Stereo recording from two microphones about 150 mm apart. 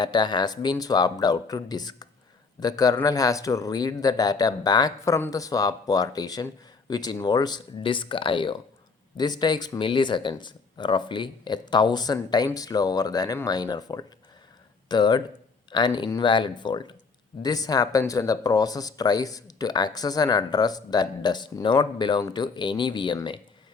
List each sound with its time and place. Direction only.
0.0 s speech: 30° left (ahead or behind)